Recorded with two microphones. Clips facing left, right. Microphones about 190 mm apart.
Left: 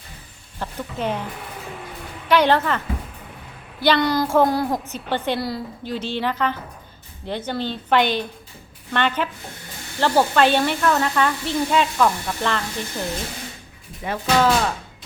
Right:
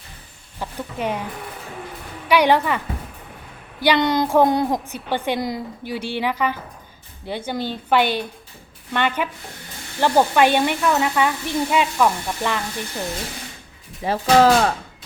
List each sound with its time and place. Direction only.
0.6 s speech: 10° right (ahead or behind)
2.2 s a woman's voice: 10° right (ahead or behind)
14.0 s speech: 35° right (ahead or behind)